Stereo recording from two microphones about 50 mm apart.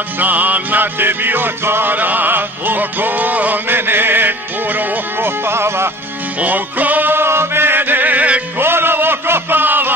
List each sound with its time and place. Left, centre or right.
0.2 s music: right
6.4 s music: right
7.2 s music: right
8.5 s music: right